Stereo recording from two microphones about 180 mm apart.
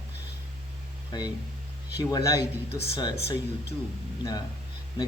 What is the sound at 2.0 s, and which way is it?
A man's voice, 20° left (ahead or behind).